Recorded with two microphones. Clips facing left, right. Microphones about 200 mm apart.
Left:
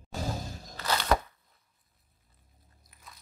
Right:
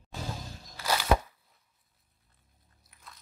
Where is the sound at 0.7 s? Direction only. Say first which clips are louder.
Right 1 dB; 10° right (ahead or behind).